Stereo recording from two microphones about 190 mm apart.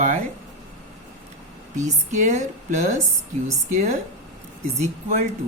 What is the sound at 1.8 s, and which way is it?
Speech, 40° right (ahead or behind).